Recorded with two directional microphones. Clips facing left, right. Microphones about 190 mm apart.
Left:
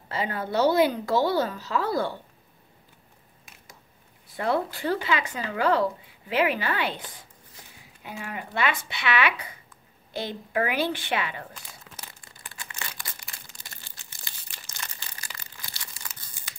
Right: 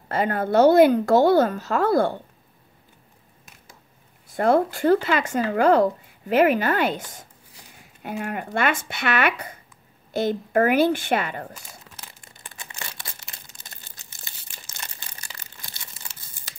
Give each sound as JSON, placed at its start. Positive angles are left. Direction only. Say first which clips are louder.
{"t": 0.1, "sound": "speech", "louder": "right 7 dB", "side_deg": -50}
{"t": 4.3, "sound": "speech", "louder": "right 7 dB", "side_deg": -45}
{"t": 12.3, "sound": "a sound", "louder": "right 1 dB", "side_deg": -20}
{"t": 13.6, "sound": "crumpling", "louder": "right 1 dB", "side_deg": -20}